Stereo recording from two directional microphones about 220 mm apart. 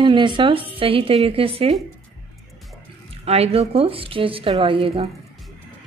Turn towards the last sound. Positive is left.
turn(degrees=-25)  # may be behind; listen again after turning